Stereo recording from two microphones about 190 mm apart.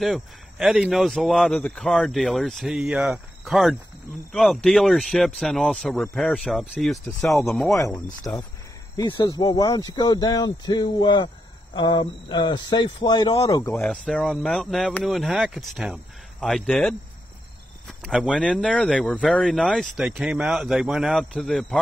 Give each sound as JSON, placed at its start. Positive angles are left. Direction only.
{"t": 0.0, "sound": "speech", "side_deg": 0}
{"t": 7.7, "sound": "speech", "side_deg": 15}
{"t": 8.9, "sound": "speech", "side_deg": 25}
{"t": 13.7, "sound": "speech", "side_deg": 5}